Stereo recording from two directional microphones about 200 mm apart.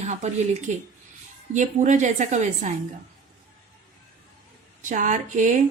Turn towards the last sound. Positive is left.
turn(degrees=-40)  # may be behind; listen again after turning